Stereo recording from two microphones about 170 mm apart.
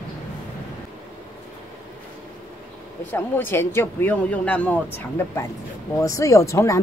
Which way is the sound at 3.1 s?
10° left (ahead or behind).